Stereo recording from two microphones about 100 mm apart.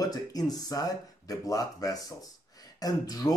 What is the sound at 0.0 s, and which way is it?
Speech, 40° left (ahead or behind).